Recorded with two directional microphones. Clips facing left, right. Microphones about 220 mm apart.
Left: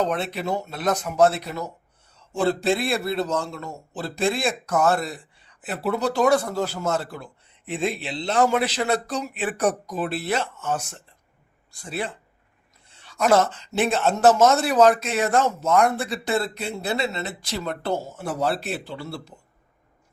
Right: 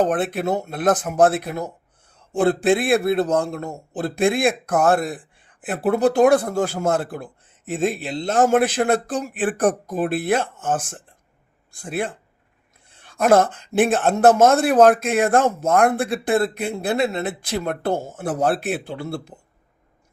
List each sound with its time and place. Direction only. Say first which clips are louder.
0.0 s a man's voice: right 5 dB; 50° right (ahead or behind)
12.9 s a sound: right 3 dB; 55° right (ahead or behind)
13.7 s a man's voice: right 4 dB; 50° right (ahead or behind)